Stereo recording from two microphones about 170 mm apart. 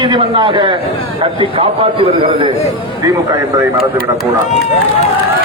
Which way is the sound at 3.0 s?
20° right (ahead or behind).